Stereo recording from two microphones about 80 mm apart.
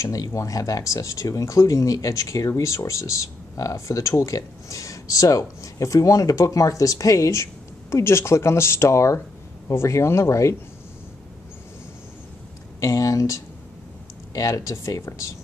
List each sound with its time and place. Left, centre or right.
0.0 s speech: left
12.8 s speech: left